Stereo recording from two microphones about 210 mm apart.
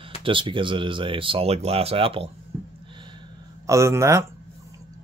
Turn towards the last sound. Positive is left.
turn(degrees=-15)  # may be behind; listen again after turning